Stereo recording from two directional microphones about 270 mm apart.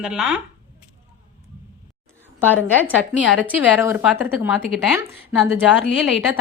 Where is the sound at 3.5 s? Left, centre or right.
Centre.